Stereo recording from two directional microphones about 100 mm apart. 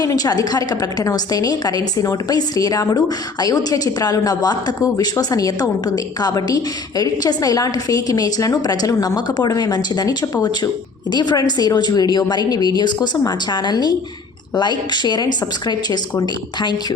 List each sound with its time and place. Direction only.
0.0 s a woman's voice: 40° left (ahead or behind)